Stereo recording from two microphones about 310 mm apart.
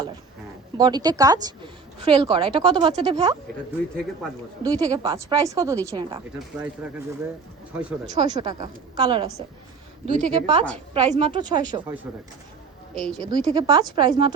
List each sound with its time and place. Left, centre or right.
0.8 s a woman's voice: centre
4.6 s a woman's voice: centre
7.8 s a woman's voice: centre
13.2 s a woman's voice: centre